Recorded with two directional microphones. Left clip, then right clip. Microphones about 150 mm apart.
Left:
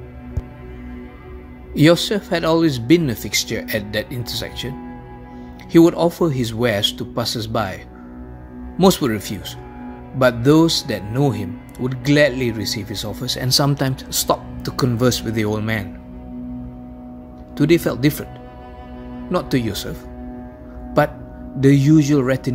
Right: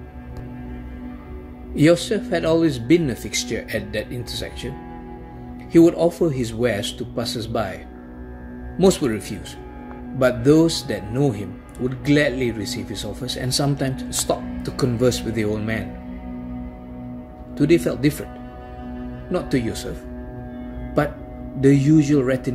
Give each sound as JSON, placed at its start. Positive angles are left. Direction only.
{"t": 1.7, "sound": "speech", "side_deg": 70}
{"t": 5.7, "sound": "speech", "side_deg": 70}
{"t": 8.7, "sound": "speech", "side_deg": 70}
{"t": 17.6, "sound": "speech", "side_deg": 70}
{"t": 19.3, "sound": "speech", "side_deg": 70}
{"t": 21.5, "sound": "speech", "side_deg": 70}